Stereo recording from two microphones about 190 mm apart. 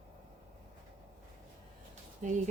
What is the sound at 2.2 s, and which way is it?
Speech, 40° right (ahead or behind).